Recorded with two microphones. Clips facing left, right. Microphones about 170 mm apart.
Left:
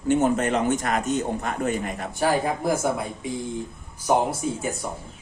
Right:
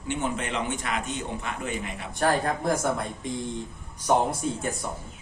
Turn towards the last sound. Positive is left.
turn(degrees=5)  # may be behind; listen again after turning